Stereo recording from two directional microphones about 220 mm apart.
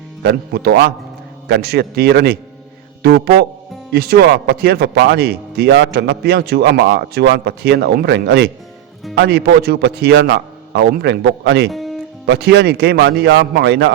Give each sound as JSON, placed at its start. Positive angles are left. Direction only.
{"t": 0.2, "sound": "speech", "side_deg": -50}
{"t": 11.7, "sound": "music", "side_deg": 0}
{"t": 12.2, "sound": "speech", "side_deg": -50}